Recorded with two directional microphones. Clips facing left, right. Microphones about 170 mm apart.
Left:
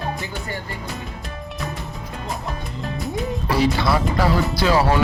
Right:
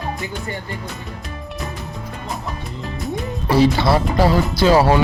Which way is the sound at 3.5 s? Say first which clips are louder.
Right 5 dB; 30° right (ahead or behind).